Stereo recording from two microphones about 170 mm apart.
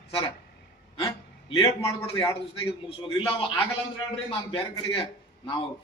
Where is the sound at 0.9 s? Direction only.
20° left (ahead or behind).